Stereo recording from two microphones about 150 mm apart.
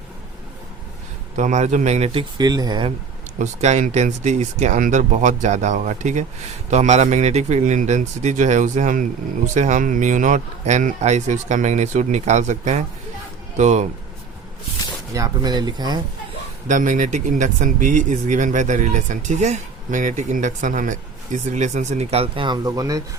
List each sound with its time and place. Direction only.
1.4 s speech: 50° right (ahead or behind)
2.4 s speech: 25° right (ahead or behind)
3.3 s speech: 50° right (ahead or behind)
15.1 s speech: 25° right (ahead or behind)
16.6 s speech: 60° right (ahead or behind); by 23.0 s 20° right (ahead or behind)